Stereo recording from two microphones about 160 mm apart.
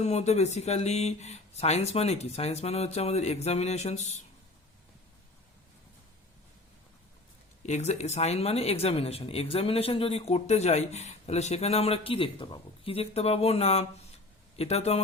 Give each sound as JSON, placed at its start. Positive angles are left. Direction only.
{"t": 0.0, "sound": "speech", "side_deg": 45}
{"t": 7.6, "sound": "speech", "side_deg": 45}